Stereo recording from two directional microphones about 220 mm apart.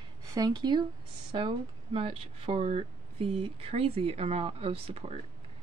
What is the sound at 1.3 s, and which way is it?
Speech, 25° right (ahead or behind).